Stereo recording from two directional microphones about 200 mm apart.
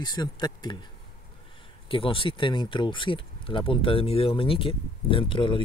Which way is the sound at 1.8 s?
25° left (ahead or behind).